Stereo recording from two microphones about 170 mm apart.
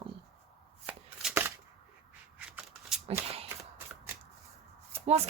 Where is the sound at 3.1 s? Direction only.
35° right (ahead or behind).